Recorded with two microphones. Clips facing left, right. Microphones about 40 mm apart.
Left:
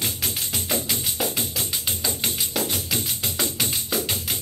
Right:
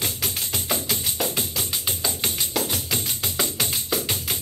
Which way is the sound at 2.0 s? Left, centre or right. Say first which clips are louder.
Even; centre.